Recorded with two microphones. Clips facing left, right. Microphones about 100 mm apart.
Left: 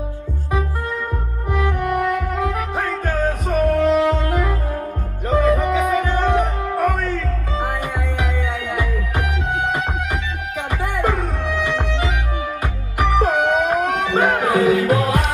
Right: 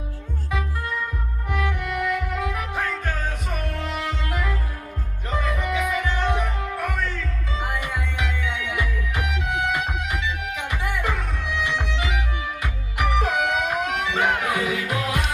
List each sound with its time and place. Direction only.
1.5 s music: 35° left (ahead or behind)